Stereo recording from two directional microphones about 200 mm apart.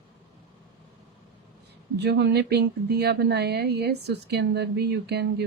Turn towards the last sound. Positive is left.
turn(degrees=-55)  # may be behind; listen again after turning